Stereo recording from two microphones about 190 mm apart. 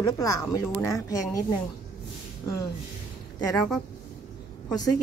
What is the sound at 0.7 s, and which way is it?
Speech, 15° left (ahead or behind).